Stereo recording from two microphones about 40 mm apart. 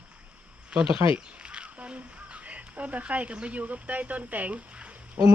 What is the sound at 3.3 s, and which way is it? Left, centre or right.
Speech, right.